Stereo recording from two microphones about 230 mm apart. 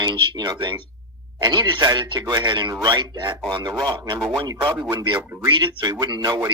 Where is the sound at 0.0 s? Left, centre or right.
Centre.